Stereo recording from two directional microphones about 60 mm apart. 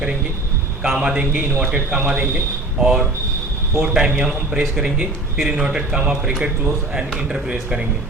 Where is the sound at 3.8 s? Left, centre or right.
Centre.